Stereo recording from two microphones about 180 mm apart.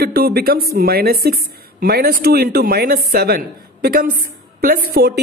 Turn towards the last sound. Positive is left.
turn(degrees=-60)  # may be behind; listen again after turning